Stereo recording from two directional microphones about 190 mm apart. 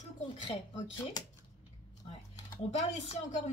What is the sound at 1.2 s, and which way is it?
Speech, 20° left (ahead or behind).